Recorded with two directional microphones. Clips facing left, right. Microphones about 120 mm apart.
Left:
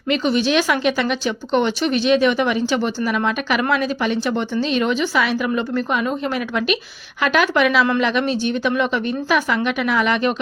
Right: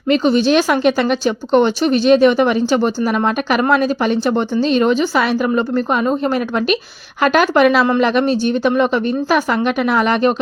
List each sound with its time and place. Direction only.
0.1 s speech: 35° right (ahead or behind)